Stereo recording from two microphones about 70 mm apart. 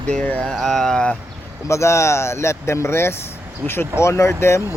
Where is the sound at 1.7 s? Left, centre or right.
Left.